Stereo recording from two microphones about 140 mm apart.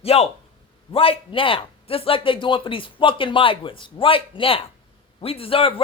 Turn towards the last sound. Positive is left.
turn(degrees=40)  # may be behind; listen again after turning